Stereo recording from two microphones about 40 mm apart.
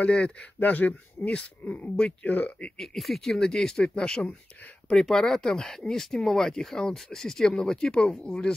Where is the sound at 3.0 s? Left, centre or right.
Centre.